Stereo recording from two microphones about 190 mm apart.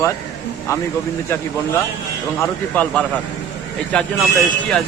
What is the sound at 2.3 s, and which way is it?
Speech, 10° left (ahead or behind).